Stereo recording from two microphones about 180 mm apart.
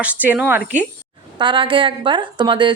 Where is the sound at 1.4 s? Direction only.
25° right (ahead or behind).